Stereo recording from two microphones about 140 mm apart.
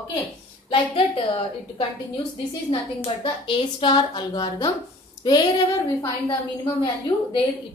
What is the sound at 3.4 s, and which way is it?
A woman's voice, 35° left (ahead or behind).